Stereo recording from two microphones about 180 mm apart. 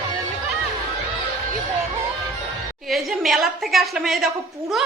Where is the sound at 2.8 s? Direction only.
Centre (ahead or behind).